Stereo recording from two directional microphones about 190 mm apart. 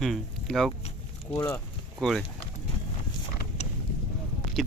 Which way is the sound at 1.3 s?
15° left (ahead or behind).